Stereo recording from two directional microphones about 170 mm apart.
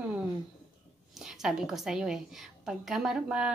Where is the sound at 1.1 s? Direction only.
Centre (ahead or behind).